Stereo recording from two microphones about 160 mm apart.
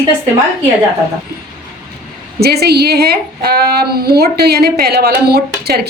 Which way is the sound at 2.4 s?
85° right.